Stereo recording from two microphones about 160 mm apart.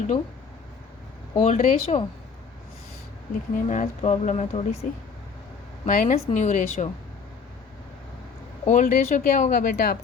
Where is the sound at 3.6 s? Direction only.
45° left (ahead or behind).